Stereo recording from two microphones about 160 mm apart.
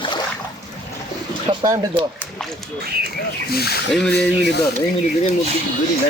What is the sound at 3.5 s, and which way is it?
Speech, 80° left.